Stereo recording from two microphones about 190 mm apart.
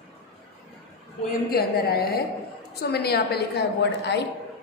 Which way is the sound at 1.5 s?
55° left (ahead or behind).